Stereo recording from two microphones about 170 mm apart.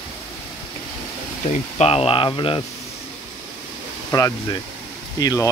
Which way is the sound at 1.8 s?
35° left (ahead or behind).